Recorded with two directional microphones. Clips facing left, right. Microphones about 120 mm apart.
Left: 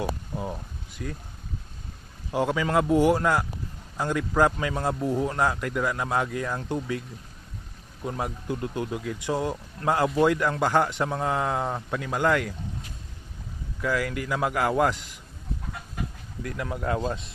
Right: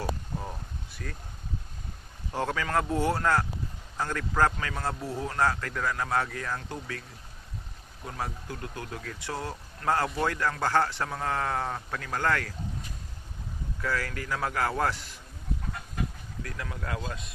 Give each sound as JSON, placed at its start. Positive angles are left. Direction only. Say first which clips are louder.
{"t": 0.3, "sound": "a sound", "louder": "left 5 dB", "side_deg": 15}
{"t": 2.3, "sound": "speech", "louder": "left 5 dB", "side_deg": 15}
{"t": 8.0, "sound": "speech", "louder": "left 6 dB", "side_deg": 20}
{"t": 13.8, "sound": "speech", "louder": "left 5 dB", "side_deg": 10}
{"t": 16.6, "sound": "speech", "louder": "left 10 dB", "side_deg": 25}